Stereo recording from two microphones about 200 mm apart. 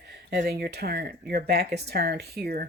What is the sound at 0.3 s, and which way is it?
Speech, 55° right (ahead or behind).